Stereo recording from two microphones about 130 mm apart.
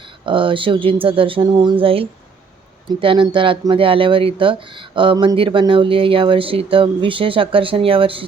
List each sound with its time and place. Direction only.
0.3 s speech: 40° right (ahead or behind)